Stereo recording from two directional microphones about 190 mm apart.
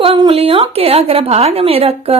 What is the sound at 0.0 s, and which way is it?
A woman's voice, 30° right (ahead or behind).